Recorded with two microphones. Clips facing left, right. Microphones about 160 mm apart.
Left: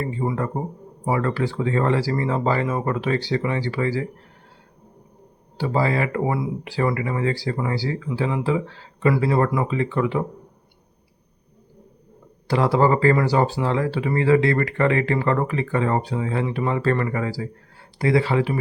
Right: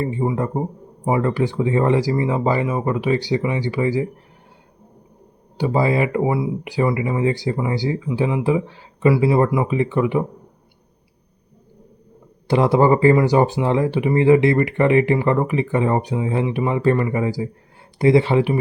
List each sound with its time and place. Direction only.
0.0 s speech: 20° right (ahead or behind)
5.5 s speech: 15° right (ahead or behind)
12.5 s speech: 20° right (ahead or behind)